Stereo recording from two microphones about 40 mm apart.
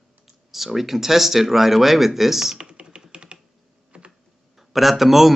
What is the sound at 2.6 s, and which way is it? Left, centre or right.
Computer keyboard, right.